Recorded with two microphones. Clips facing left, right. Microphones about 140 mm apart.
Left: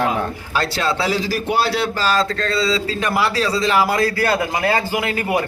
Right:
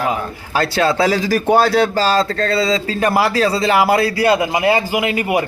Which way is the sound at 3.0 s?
30° right (ahead or behind).